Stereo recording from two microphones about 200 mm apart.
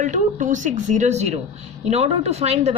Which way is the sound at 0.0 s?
40° right (ahead or behind).